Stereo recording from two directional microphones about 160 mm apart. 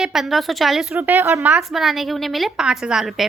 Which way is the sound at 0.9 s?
15° right (ahead or behind).